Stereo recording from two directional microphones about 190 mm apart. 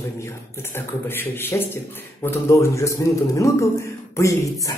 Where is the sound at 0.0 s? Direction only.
15° left (ahead or behind).